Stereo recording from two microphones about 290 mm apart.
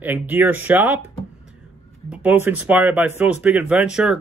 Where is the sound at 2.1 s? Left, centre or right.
Centre.